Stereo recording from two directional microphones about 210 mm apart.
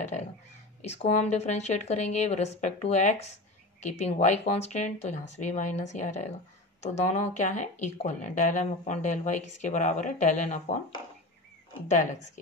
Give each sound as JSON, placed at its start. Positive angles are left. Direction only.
{"t": 0.8, "sound": "speech", "side_deg": 30}
{"t": 11.9, "sound": "speech", "side_deg": 35}